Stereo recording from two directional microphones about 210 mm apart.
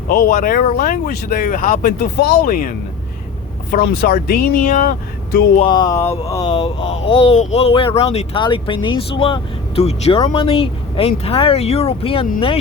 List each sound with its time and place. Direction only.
0.1 s speech: 40° left (ahead or behind)
5.5 s speech: 20° left (ahead or behind)
6.5 s speech: 30° left (ahead or behind)